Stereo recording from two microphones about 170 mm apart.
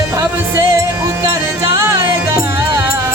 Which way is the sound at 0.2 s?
15° right (ahead or behind).